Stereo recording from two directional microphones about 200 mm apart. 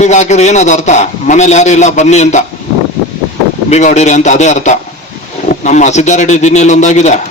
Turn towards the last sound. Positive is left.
turn(degrees=35)  # may be behind; listen again after turning